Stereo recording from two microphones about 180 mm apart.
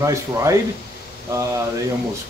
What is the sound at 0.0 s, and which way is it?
Speech, 15° right (ahead or behind).